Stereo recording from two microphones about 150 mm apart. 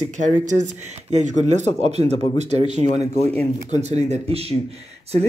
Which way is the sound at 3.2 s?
10° left (ahead or behind).